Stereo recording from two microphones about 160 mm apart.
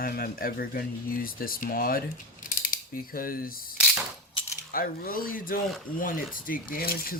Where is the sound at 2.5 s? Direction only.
60° left (ahead or behind).